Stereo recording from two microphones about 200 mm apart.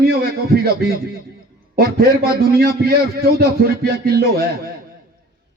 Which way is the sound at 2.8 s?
50° right (ahead or behind).